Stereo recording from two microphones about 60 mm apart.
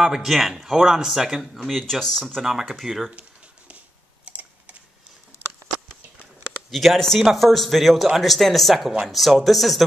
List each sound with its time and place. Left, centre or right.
0.0 s speech: centre
4.3 s typing: right
6.7 s speech: centre